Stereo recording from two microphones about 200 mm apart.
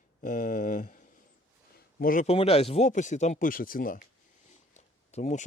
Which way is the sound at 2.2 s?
30° left (ahead or behind).